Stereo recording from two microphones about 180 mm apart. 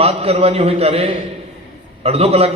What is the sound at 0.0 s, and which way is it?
A man's voice, 35° right (ahead or behind).